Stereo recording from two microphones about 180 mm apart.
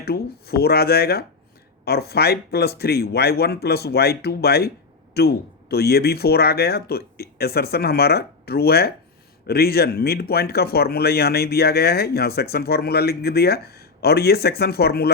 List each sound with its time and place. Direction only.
0.0 s speech: 60° left (ahead or behind)